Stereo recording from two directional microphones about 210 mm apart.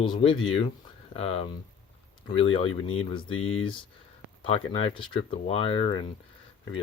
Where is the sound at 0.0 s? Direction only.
25° left (ahead or behind).